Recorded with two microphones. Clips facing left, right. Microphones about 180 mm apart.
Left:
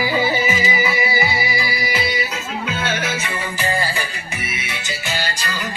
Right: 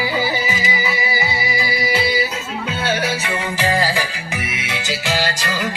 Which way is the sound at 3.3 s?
90° right.